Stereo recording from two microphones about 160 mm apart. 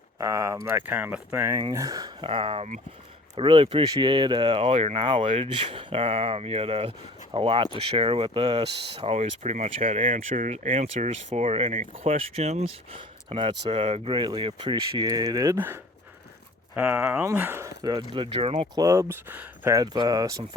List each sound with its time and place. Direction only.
0.2 s speech: 20° right (ahead or behind); by 2.8 s 45° right (ahead or behind)
3.3 s speech: 30° right (ahead or behind)
18.7 s speech: 20° right (ahead or behind)